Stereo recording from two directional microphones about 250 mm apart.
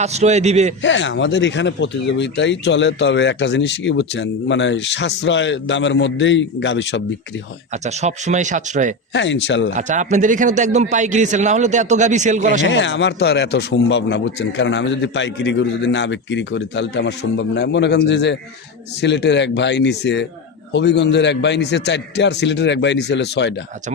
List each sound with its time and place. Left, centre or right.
0.0 s a man's voice: right
0.8 s speech: left
7.7 s a man's voice: right
9.1 s speech: left
9.7 s a man's voice: right
12.6 s speech: left